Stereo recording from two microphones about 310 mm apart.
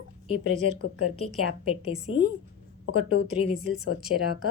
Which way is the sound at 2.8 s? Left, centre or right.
Left.